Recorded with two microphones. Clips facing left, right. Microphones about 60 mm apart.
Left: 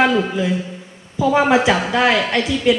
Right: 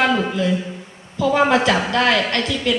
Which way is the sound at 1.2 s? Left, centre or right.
Centre.